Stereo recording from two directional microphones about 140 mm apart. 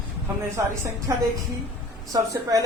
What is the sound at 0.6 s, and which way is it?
A woman's voice, 20° right (ahead or behind).